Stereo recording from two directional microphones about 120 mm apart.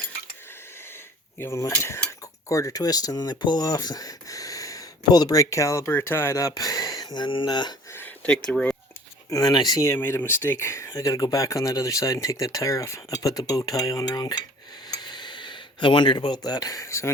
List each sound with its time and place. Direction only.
1.4 s speech: 25° left (ahead or behind)
7.9 s speech: 10° left (ahead or behind)
9.3 s speech: 30° left (ahead or behind)
13.6 s cutlery: 30° left (ahead or behind)
14.8 s a sound: 35° left (ahead or behind)